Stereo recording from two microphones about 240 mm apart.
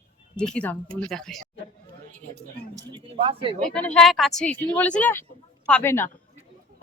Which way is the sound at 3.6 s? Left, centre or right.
Centre.